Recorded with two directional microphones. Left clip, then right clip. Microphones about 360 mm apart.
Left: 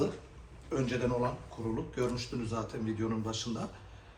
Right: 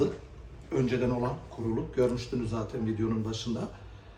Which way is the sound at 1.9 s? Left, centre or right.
Centre.